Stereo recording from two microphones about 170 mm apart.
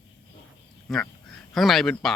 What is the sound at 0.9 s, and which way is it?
Speech, centre (ahead or behind).